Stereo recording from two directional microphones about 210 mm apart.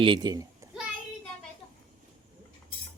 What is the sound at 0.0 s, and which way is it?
Speech, 20° right (ahead or behind).